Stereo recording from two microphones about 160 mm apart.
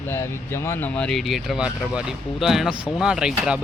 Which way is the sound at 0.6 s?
10° left (ahead or behind).